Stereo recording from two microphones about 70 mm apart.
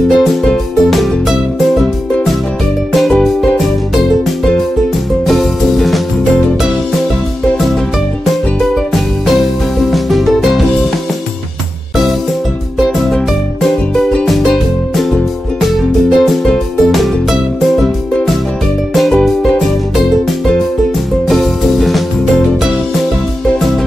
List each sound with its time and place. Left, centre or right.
0.1 s music: centre
2.9 s music: centre
5.2 s music: centre
9.9 s music: centre
12.7 s music: centre
16.1 s music: centre